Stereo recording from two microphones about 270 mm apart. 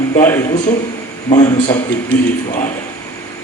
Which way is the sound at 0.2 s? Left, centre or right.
Centre.